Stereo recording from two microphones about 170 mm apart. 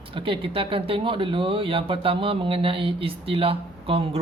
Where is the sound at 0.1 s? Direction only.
30° right (ahead or behind).